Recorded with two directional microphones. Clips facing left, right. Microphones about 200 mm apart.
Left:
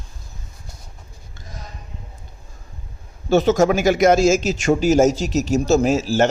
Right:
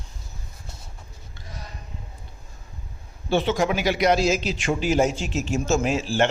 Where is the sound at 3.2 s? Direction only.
40° left (ahead or behind).